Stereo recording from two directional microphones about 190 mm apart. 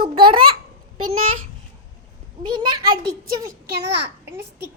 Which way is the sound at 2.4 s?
25° right (ahead or behind).